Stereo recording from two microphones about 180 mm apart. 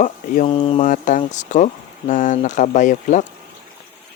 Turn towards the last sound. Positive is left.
turn(degrees=45)  # may be behind; listen again after turning